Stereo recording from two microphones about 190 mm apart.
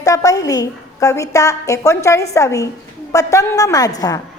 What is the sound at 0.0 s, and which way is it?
A woman's voice, 15° left (ahead or behind).